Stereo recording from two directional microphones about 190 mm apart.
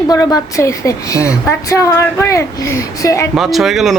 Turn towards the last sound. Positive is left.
turn(degrees=0)  # may be behind; listen again after turning